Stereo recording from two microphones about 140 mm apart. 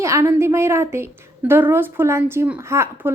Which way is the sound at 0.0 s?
20° right (ahead or behind).